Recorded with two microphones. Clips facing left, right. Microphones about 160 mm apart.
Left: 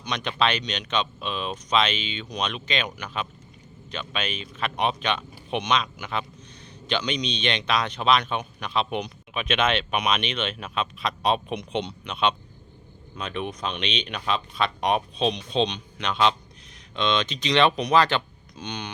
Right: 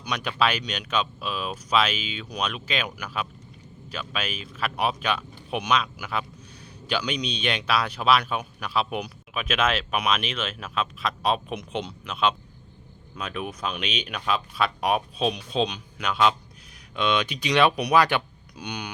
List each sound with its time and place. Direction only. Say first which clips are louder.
0.0 s speech: even; 10° right (ahead or behind)